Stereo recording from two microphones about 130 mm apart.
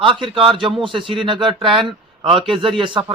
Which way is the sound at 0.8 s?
40° right (ahead or behind).